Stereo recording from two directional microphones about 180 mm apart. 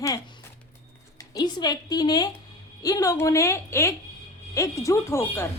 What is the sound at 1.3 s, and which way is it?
A woman's voice, 20° left (ahead or behind).